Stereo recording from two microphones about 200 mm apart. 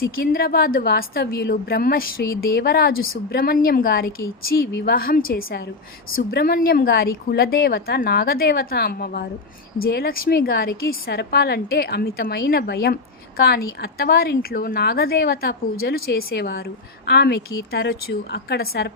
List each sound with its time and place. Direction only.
0.2 s a woman's voice: 50° left (ahead or behind)